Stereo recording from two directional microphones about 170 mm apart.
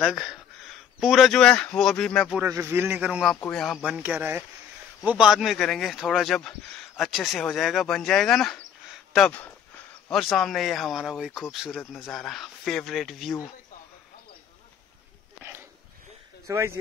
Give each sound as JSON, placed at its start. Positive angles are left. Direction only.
{"t": 0.0, "sound": "speech", "side_deg": 0}
{"t": 2.4, "sound": "speech", "side_deg": -15}
{"t": 16.4, "sound": "speech", "side_deg": -15}